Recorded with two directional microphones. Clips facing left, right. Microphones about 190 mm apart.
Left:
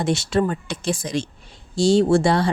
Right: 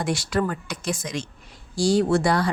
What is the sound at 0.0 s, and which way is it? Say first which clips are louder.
A woman's voice: left 4 dB; 25° left (ahead or behind).